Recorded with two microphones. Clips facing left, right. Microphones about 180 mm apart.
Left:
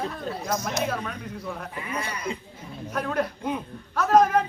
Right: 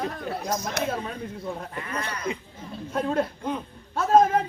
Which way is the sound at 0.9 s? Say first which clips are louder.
Even; 25° right (ahead or behind).